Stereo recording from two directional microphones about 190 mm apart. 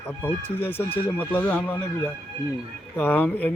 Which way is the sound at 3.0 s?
10° left (ahead or behind).